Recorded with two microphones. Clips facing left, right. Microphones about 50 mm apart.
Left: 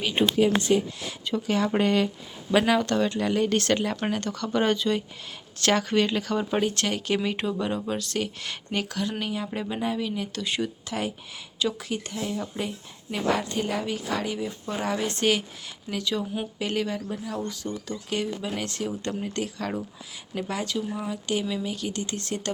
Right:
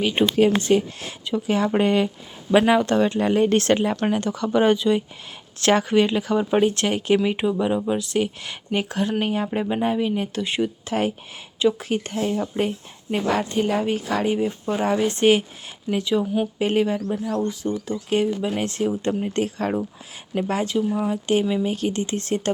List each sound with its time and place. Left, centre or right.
0.6 s speech: right
1.5 s speech: centre
4.0 s speech: centre
5.5 s speech: right
5.8 s speech: centre
8.9 s speech: right
9.5 s speech: right
16.2 s speech: centre
16.6 s speech: right